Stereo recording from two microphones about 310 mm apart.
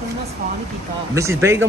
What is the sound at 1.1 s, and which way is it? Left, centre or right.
Speech, centre.